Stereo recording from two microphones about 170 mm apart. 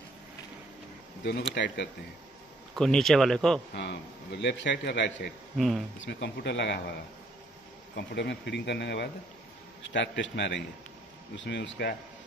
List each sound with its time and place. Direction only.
1.5 s speech: 90° left
2.7 s speech: 5° left (ahead or behind)
3.7 s a man's voice: 85° left
5.6 s speech: centre (ahead or behind)
5.9 s speech: 90° left
7.9 s a man's voice: 80° left
9.8 s speech: 90° left